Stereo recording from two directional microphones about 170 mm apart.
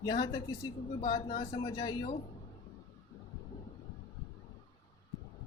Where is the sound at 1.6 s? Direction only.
25° left (ahead or behind).